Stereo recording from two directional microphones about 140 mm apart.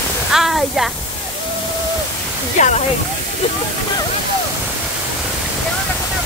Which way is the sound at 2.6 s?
55° left (ahead or behind).